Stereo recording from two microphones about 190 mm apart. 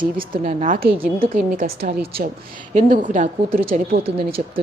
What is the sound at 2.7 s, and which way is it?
A woman's voice, 40° right (ahead or behind).